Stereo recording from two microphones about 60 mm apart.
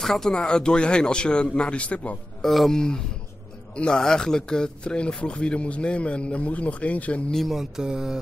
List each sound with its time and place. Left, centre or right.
0.0 s speech: centre
2.4 s speech: centre
3.7 s speech: centre
7.4 s mantra: centre